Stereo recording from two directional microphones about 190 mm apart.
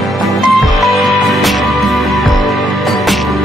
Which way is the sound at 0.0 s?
Centre (ahead or behind).